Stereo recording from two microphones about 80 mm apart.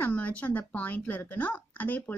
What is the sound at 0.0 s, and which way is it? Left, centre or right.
A woman's voice, centre.